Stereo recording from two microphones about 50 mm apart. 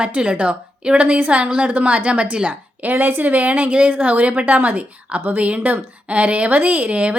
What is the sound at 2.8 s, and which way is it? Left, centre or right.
A woman's voice, right.